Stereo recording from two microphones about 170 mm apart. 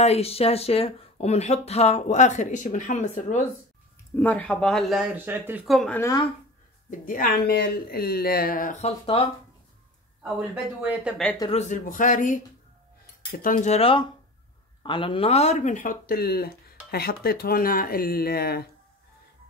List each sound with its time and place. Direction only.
0.0 s speech: 35° left (ahead or behind)
4.2 s speech: 10° left (ahead or behind)
5.1 s speech: 10° right (ahead or behind)
5.7 s speech: centre (ahead or behind)
5.9 s speech: 20° left (ahead or behind)
6.9 s speech: 55° left (ahead or behind); by 9.2 s 35° left (ahead or behind)
10.2 s speech: 10° right (ahead or behind)
11.5 s speech: 50° left (ahead or behind); by 18.7 s 65° left (ahead or behind)